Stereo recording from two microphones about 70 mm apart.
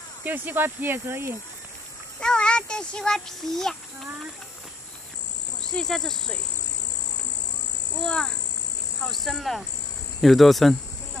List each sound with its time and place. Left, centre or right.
0.2 s speech: right
2.1 s a child's voice: centre
5.8 s speech: centre
7.9 s speech: centre